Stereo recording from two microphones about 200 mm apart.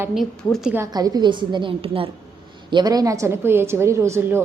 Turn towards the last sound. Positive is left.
turn(degrees=-15)  # may be behind; listen again after turning